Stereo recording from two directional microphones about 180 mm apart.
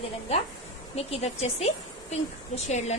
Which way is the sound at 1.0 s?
35° left (ahead or behind).